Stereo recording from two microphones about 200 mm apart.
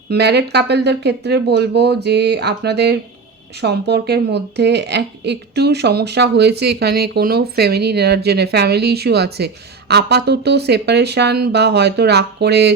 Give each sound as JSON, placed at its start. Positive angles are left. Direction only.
{"t": 0.1, "sound": "speech", "side_deg": -55}